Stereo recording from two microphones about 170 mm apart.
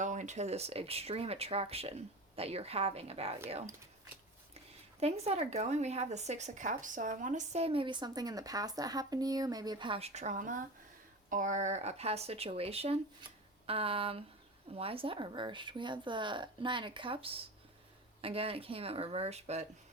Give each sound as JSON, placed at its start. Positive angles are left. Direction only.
{"t": 0.0, "sound": "a woman's voice", "side_deg": -45}
{"t": 4.9, "sound": "a woman's voice", "side_deg": -35}